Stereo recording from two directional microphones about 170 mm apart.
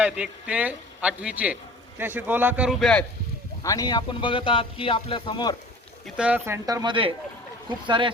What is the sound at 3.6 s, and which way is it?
A man's voice, 20° left (ahead or behind).